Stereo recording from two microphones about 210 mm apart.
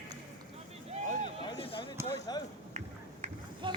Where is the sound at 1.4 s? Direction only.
25° left (ahead or behind).